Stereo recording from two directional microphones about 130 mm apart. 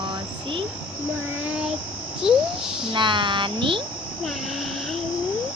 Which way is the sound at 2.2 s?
5° right (ahead or behind).